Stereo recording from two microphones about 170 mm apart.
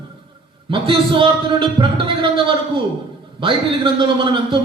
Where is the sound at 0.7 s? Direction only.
30° right (ahead or behind).